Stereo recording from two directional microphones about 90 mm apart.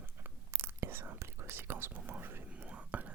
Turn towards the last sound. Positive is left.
turn(degrees=-15)  # may be behind; listen again after turning